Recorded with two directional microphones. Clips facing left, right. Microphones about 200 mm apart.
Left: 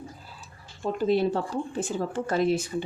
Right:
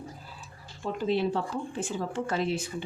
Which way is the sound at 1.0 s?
40° left (ahead or behind).